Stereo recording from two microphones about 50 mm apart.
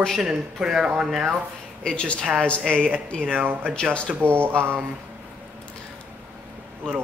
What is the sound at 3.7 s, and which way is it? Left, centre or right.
Speech, left.